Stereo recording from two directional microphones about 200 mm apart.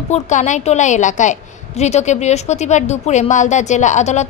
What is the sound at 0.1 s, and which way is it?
A woman's voice, 35° left (ahead or behind).